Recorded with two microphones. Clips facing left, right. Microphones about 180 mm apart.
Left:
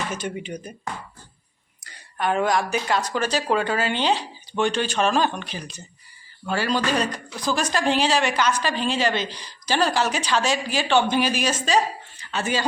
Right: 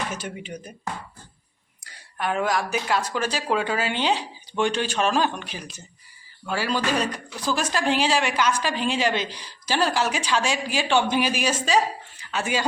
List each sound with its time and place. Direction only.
0.1 s speech: 5° right (ahead or behind)
1.8 s a woman's voice: 10° right (ahead or behind)